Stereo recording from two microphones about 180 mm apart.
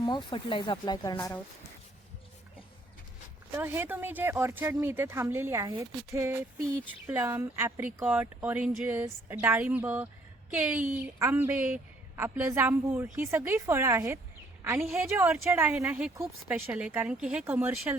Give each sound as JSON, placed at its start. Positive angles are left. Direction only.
{"t": 0.0, "sound": "speech", "side_deg": 25}
{"t": 3.5, "sound": "a woman's voice", "side_deg": -15}